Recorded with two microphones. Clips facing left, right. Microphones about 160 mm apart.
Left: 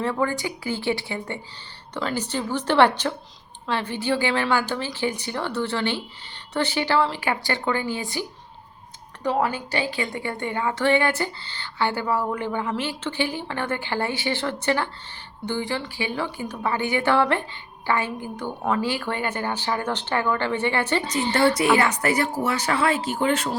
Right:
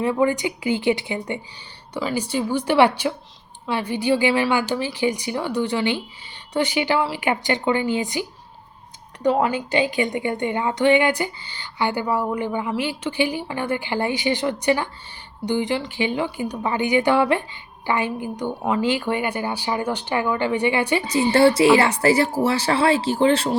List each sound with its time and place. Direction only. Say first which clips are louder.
0.0 s a woman's voice: right 5 dB; 15° right (ahead or behind)
9.5 s a woman's voice: right 6 dB; 20° right (ahead or behind)
21.3 s speech: right 5 dB; 30° right (ahead or behind)